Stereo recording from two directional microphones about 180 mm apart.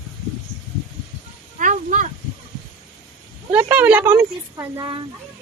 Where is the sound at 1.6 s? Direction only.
45° right (ahead or behind).